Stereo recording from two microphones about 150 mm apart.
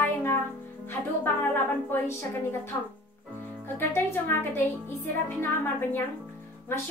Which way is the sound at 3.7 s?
15° left (ahead or behind).